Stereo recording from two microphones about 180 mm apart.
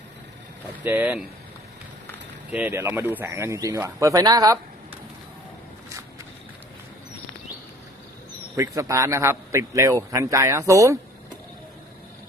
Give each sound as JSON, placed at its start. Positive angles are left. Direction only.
{"t": 0.9, "sound": "speech", "side_deg": -10}
{"t": 2.5, "sound": "speech", "side_deg": -10}
{"t": 8.5, "sound": "speech", "side_deg": -20}